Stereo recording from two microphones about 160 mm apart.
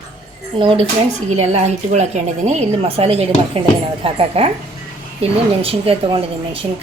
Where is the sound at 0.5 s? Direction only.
30° right (ahead or behind).